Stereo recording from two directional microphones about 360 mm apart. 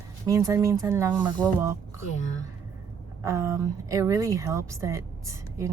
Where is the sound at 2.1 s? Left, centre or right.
Centre.